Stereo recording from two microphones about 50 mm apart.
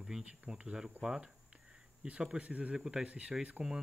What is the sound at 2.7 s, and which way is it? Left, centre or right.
Speech, centre.